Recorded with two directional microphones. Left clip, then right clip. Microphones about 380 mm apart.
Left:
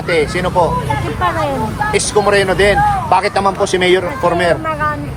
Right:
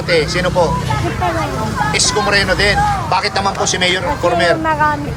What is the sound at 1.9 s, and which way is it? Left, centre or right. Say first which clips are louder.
Speech: left 2 dB; centre.